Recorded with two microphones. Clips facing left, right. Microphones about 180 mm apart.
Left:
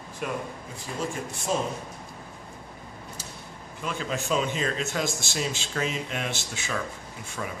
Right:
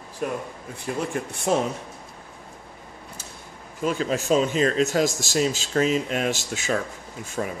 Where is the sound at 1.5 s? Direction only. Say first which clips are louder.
Right 5 dB; 65° right (ahead or behind).